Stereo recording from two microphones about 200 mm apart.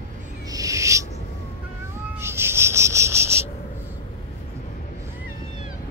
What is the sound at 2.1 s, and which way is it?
Cricket, 10° right (ahead or behind).